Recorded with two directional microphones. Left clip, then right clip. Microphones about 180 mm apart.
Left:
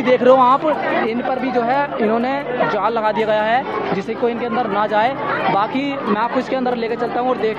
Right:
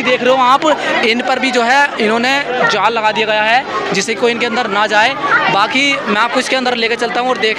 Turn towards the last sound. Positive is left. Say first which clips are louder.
# right 7 dB
turn(degrees=0)  # may be behind; listen again after turning